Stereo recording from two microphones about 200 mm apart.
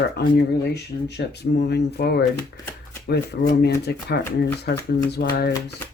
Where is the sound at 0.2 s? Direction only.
55° left (ahead or behind).